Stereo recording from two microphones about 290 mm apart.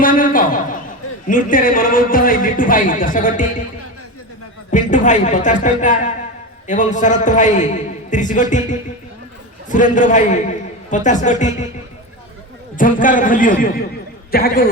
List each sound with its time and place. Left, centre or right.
0.0 s a sound: left
1.3 s a man's voice: left
4.7 s a man's voice: left
12.7 s a man's voice: left